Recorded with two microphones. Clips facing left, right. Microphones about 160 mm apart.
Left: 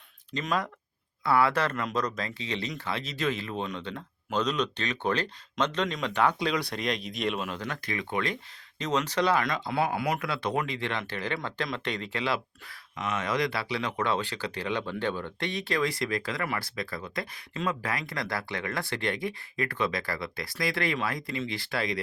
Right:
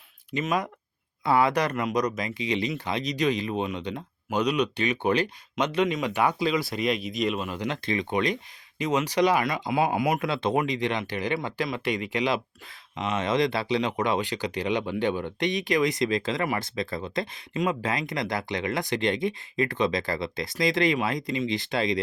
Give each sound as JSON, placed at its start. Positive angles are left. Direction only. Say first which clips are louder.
{"t": 0.3, "sound": "speech", "louder": "right 3 dB", "side_deg": -10}
{"t": 7.6, "sound": "speech", "louder": "right 6 dB", "side_deg": -25}